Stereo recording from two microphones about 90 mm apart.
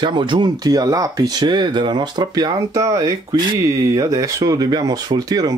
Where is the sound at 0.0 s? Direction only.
60° right (ahead or behind).